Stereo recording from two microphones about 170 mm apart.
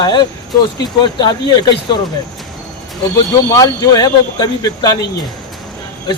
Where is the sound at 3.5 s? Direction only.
20° left (ahead or behind).